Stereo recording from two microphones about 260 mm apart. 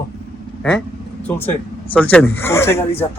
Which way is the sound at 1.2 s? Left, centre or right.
Centre.